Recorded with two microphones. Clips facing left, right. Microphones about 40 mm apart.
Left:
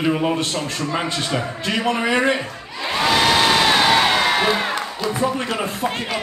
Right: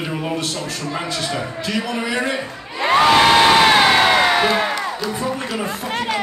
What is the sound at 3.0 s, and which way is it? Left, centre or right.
Crowd, right.